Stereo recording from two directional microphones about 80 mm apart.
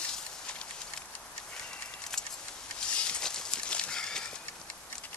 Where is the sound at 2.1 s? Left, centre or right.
Centre.